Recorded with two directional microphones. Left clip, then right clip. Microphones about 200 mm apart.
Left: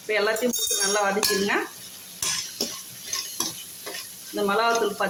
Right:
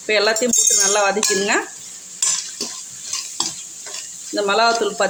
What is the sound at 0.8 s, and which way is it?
Speech, 50° right (ahead or behind).